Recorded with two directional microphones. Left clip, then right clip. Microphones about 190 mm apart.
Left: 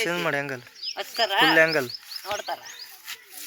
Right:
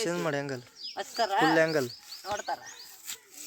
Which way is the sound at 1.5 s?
15° right (ahead or behind).